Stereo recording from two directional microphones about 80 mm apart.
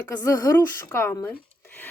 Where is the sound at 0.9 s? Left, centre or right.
Left.